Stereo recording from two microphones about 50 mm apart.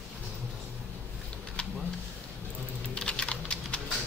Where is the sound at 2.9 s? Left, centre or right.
Centre.